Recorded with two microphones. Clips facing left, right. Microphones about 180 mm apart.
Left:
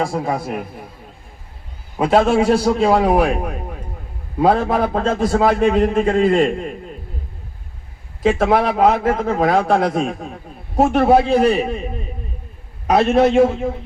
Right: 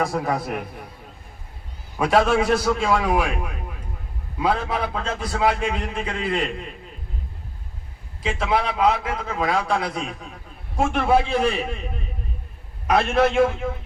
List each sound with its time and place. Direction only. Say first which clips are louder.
0.1 s a man's voice: left 3 dB; 15° left (ahead or behind)
2.0 s a man's voice: left 4 dB; 25° left (ahead or behind); by 6.7 s 45° left (ahead or behind)
8.2 s a man's voice: left 8 dB; 45° left (ahead or behind)
12.9 s a man's voice: left 6 dB; 40° left (ahead or behind)